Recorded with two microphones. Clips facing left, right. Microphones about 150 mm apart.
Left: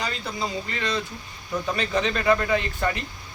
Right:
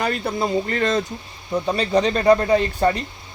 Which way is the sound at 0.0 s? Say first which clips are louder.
Right 7 dB; 55° right (ahead or behind).